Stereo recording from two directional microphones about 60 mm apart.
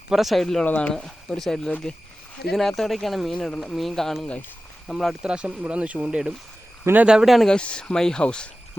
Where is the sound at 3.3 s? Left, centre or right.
Centre.